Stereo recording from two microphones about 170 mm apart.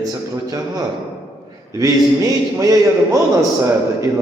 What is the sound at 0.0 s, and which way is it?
A man's voice, 20° right (ahead or behind).